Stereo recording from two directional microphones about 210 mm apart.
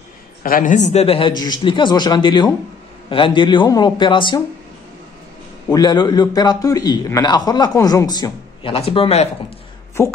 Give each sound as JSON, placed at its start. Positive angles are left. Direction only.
{"t": 0.4, "sound": "a man's voice", "side_deg": 40}
{"t": 5.7, "sound": "a man's voice", "side_deg": 20}
{"t": 10.0, "sound": "speech", "side_deg": 15}